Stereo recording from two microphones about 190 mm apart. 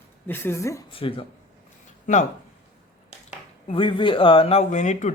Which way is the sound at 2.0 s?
40° left (ahead or behind).